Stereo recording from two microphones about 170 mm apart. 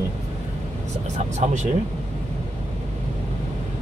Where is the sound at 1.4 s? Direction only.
45° right (ahead or behind).